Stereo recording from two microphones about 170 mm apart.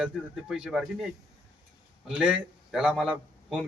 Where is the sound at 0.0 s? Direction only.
5° right (ahead or behind).